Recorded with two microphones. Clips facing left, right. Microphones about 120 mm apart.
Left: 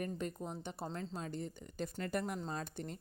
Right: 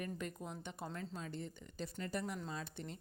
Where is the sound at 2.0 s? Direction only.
55° left (ahead or behind).